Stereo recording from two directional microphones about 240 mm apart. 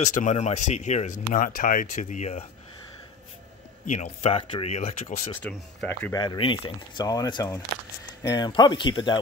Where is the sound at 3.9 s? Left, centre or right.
Left.